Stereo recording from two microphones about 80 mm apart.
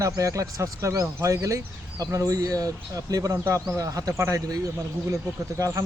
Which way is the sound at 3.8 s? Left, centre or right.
Right.